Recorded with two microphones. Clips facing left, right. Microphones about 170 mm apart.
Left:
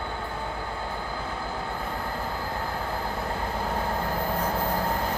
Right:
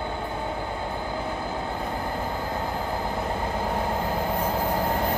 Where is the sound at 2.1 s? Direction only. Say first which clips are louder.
Right 3 dB; 20° right (ahead or behind).